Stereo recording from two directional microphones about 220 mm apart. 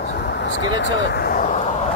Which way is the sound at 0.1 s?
50° left (ahead or behind).